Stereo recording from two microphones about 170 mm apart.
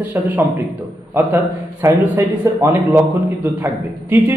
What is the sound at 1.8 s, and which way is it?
Speech, 15° right (ahead or behind).